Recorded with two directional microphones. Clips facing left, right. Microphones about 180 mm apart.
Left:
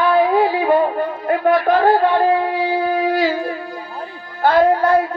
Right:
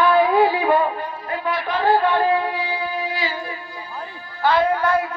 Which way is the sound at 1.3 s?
55° left (ahead or behind).